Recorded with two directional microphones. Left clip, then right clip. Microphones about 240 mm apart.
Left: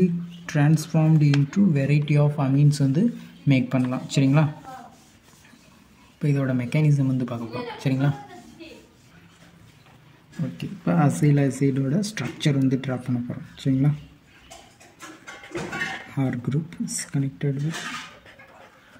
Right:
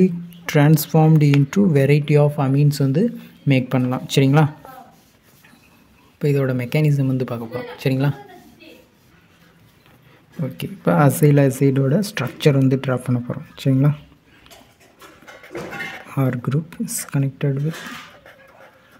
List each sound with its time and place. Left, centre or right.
0.0 s speech: right
6.1 s speech: right
10.6 s speech: right
16.1 s speech: right